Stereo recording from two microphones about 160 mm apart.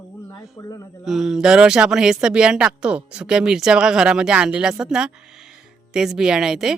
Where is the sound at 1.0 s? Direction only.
Centre (ahead or behind).